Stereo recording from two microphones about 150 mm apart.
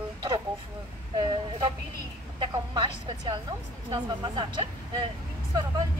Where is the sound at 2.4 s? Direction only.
30° right (ahead or behind).